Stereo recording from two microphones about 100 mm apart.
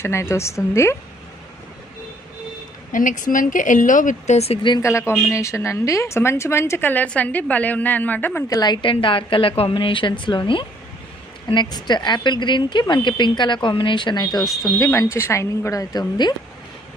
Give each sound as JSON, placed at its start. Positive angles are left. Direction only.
{"t": 0.0, "sound": "a woman's voice", "side_deg": 25}
{"t": 4.4, "sound": "speech", "side_deg": 90}
{"t": 4.8, "sound": "a woman's voice", "side_deg": 25}
{"t": 8.4, "sound": "a woman's voice", "side_deg": 40}
{"t": 14.4, "sound": "speech", "side_deg": 0}
{"t": 14.8, "sound": "speech", "side_deg": 30}